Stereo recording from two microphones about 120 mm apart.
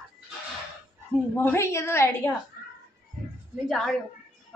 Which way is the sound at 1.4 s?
20° left (ahead or behind).